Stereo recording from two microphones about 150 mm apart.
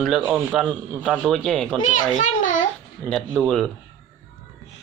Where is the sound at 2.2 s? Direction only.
55° left (ahead or behind).